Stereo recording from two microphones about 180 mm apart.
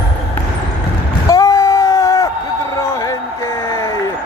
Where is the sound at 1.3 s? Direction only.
20° left (ahead or behind).